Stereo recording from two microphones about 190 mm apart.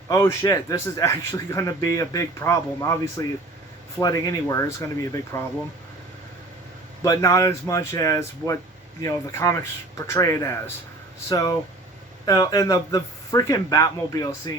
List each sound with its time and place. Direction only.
0.1 s a man's voice: 15° left (ahead or behind)
7.0 s a man's voice: 20° left (ahead or behind)